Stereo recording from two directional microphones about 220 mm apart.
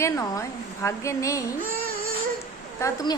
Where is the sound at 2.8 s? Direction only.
15° left (ahead or behind).